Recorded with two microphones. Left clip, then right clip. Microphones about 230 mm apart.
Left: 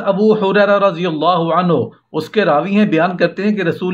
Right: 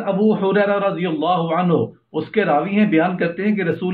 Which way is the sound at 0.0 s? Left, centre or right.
Left.